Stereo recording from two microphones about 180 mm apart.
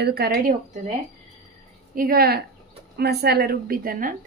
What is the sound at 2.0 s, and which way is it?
Speech, 55° right (ahead or behind).